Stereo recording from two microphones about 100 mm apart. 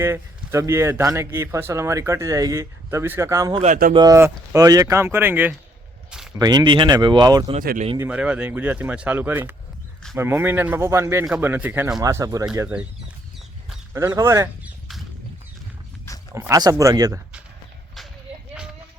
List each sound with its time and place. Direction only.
0.0 s speech: 25° right (ahead or behind)
3.9 s speech: 40° right (ahead or behind); by 5.5 s 20° right (ahead or behind)
6.3 s speech: 40° right (ahead or behind)
8.1 s speech: 15° right (ahead or behind)
11.9 s speech: 35° right (ahead or behind)
13.9 s speech: 30° right (ahead or behind)
16.1 s dog: 30° left (ahead or behind)
16.5 s speech: 35° right (ahead or behind)